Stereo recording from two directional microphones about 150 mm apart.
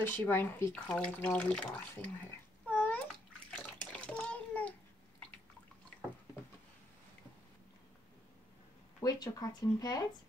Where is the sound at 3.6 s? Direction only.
10° left (ahead or behind).